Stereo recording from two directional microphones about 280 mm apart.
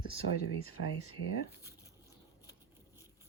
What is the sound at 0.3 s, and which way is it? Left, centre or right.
Speech, right.